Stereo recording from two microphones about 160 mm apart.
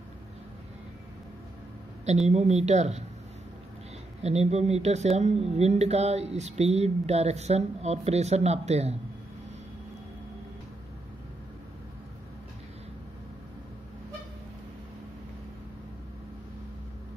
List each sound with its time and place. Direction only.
2.0 s speech: 45° right (ahead or behind)
4.2 s speech: 40° right (ahead or behind)